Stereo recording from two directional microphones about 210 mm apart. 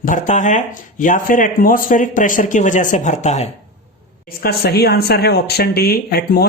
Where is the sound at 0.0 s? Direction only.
35° left (ahead or behind).